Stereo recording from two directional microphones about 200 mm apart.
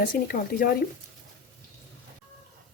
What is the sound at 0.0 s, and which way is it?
Speech, 45° left (ahead or behind).